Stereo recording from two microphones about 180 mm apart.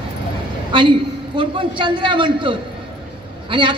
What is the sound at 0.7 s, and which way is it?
A man's voice, 25° right (ahead or behind).